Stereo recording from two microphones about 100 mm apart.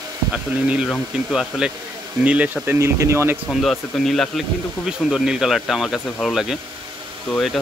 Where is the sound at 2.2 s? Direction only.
15° right (ahead or behind).